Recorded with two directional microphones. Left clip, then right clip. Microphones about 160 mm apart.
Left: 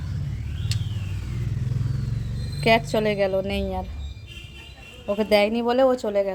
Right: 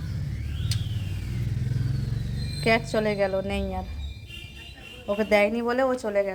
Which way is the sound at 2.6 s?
20° left (ahead or behind).